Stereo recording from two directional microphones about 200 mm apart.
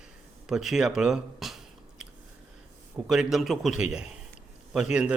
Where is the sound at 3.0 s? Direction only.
Centre (ahead or behind).